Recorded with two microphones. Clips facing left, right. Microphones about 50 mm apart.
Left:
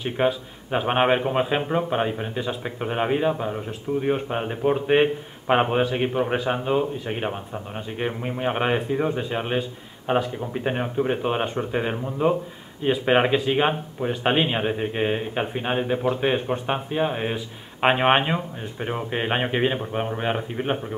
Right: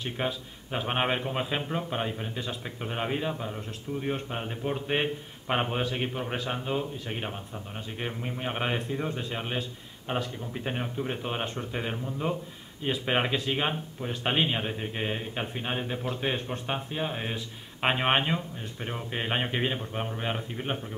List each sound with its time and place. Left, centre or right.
0.0 s speech: centre